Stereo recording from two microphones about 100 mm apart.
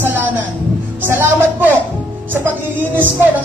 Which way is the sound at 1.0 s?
25° right (ahead or behind).